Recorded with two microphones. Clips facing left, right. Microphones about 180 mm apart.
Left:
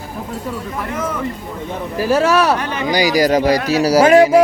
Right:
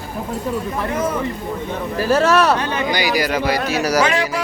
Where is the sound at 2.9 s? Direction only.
40° left (ahead or behind).